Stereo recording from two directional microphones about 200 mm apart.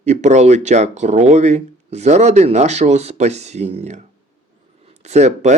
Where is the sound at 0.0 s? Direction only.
35° right (ahead or behind).